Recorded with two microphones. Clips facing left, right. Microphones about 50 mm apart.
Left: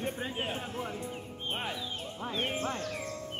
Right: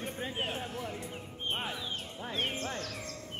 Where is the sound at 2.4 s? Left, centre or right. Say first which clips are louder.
Left 2 dB; centre.